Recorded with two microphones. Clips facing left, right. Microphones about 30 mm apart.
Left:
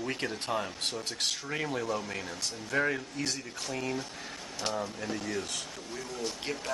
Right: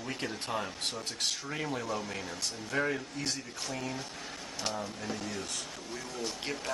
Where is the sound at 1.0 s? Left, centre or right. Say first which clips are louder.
Left 1 dB; centre.